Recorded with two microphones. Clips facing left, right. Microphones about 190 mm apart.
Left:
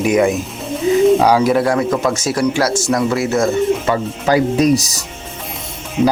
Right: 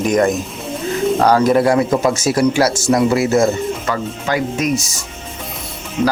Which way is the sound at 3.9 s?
35° left (ahead or behind).